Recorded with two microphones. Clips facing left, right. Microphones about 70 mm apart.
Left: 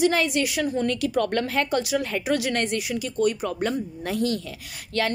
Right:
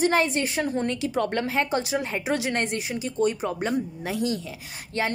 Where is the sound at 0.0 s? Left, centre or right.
Right.